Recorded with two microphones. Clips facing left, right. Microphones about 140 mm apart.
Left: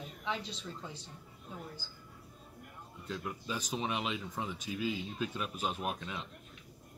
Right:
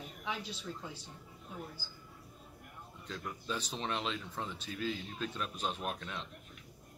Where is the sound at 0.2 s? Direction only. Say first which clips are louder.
Left 2 dB; 5° right (ahead or behind).